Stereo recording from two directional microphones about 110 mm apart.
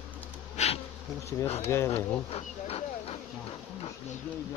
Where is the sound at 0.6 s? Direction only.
90° left.